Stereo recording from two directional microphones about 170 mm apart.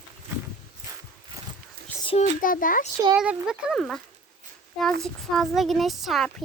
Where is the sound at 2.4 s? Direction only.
55° left (ahead or behind).